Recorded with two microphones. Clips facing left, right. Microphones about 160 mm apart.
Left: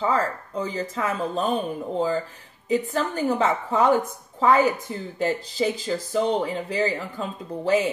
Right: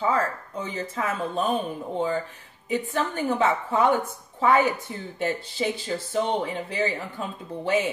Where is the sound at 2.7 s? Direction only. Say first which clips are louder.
Left 3 dB; 40° left (ahead or behind).